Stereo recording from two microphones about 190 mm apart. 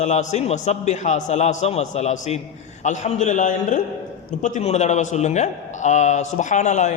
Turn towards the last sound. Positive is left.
turn(degrees=40)  # may be behind; listen again after turning